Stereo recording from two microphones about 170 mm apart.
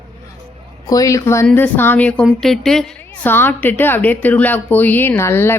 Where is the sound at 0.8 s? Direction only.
20° left (ahead or behind).